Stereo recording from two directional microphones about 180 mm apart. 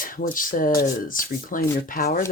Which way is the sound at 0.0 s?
50° left (ahead or behind).